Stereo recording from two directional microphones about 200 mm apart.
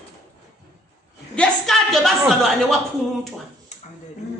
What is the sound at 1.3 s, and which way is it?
A woman's voice, 5° left (ahead or behind).